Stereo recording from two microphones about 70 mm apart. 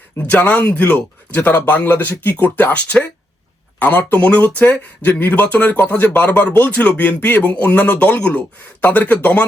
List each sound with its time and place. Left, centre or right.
0.2 s speech: left